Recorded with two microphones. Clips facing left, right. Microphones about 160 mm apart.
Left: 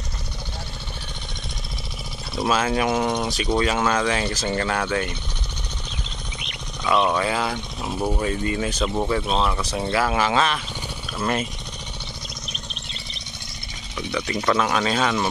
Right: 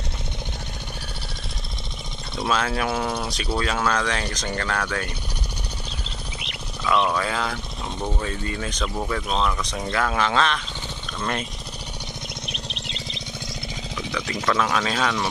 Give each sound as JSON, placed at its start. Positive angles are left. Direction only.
{"t": 2.3, "sound": "speech", "side_deg": 5}
{"t": 6.9, "sound": "speech", "side_deg": 10}
{"t": 12.4, "sound": "chirp", "side_deg": -90}
{"t": 14.4, "sound": "speech", "side_deg": 5}